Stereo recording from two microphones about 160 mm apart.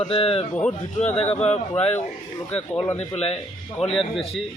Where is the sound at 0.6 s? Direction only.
10° left (ahead or behind).